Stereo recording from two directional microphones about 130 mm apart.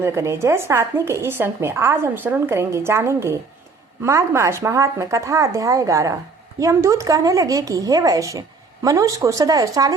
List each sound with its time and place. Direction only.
0.0 s speech: 20° right (ahead or behind)